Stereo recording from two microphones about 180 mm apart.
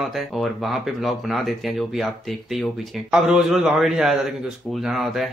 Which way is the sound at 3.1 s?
5° right (ahead or behind).